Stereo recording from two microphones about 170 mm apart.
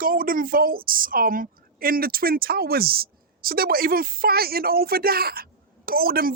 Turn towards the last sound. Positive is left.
turn(degrees=-60)  # may be behind; listen again after turning